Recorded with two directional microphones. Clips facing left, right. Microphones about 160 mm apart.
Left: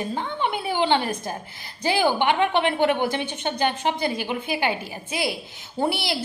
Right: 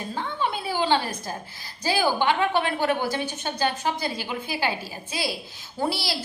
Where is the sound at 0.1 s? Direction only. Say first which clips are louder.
Left 2 dB; 20° left (ahead or behind).